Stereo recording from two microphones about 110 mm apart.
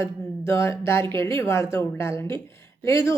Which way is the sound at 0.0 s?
25° left (ahead or behind).